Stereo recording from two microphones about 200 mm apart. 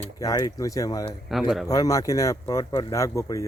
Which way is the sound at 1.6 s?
15° left (ahead or behind).